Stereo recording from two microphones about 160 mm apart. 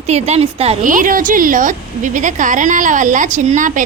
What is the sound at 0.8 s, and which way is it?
A woman's voice, 55° right (ahead or behind).